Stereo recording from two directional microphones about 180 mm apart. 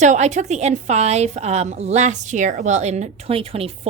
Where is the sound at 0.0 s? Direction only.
40° right (ahead or behind).